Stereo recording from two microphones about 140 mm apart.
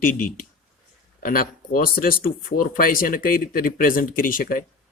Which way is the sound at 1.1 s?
90° left.